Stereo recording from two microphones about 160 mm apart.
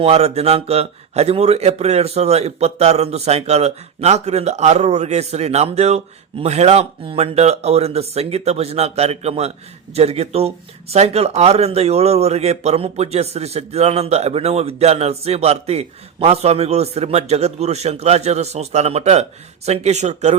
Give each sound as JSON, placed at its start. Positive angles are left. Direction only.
{"t": 0.0, "sound": "speech", "side_deg": -40}